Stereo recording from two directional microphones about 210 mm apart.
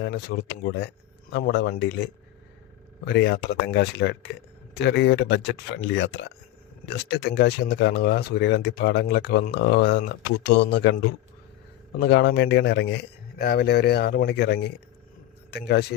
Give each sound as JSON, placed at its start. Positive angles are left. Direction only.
{"t": 0.0, "sound": "speech", "side_deg": 50}
{"t": 3.1, "sound": "speech", "side_deg": 55}
{"t": 11.9, "sound": "speech", "side_deg": 55}